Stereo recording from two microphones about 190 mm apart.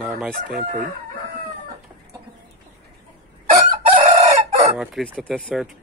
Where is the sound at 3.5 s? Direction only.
35° right (ahead or behind).